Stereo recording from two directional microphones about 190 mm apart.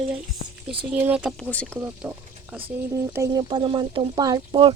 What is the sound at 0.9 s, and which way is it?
Speech, 10° right (ahead or behind).